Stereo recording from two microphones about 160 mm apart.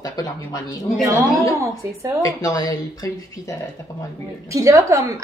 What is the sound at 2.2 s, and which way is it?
Speech, 20° left (ahead or behind).